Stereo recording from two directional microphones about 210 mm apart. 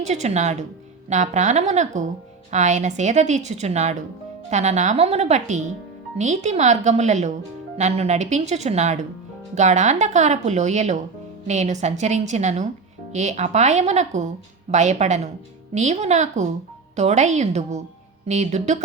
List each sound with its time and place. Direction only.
0.0 s a woman's voice: 35° right (ahead or behind)